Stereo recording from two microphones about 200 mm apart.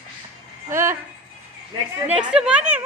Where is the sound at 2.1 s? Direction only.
5° right (ahead or behind).